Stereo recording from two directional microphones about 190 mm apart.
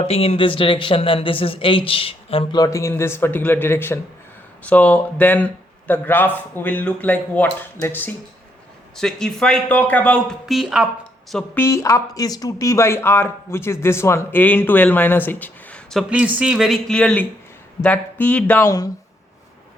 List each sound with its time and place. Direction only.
0.0 s speech: 30° left (ahead or behind)